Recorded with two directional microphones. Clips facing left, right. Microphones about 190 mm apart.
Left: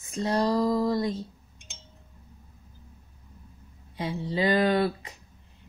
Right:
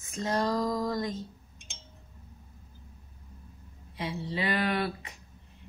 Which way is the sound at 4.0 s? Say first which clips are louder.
Left 5 dB; 30° left (ahead or behind).